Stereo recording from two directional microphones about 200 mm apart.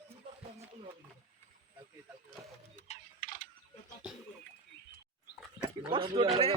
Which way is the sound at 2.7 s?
40° left (ahead or behind).